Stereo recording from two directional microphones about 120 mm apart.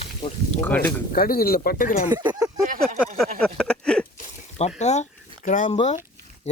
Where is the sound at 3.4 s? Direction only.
10° left (ahead or behind).